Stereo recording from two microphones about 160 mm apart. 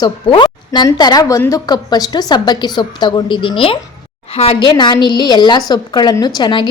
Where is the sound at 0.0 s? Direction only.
30° left (ahead or behind).